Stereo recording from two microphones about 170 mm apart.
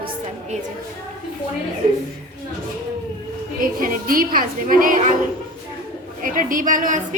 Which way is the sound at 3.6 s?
55° right (ahead or behind).